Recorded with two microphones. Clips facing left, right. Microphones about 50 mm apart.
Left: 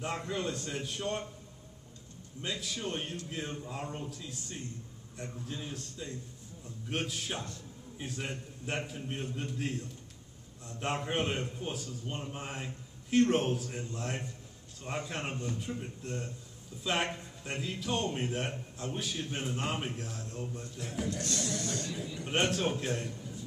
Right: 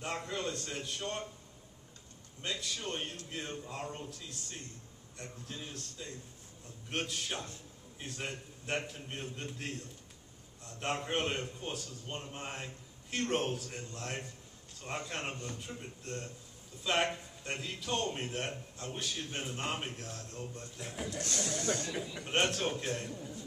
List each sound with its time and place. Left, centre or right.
0.0 s a man's voice: centre
2.4 s a man's voice: centre
20.7 s a man's voice: centre
21.2 s speech: right
22.2 s a man's voice: centre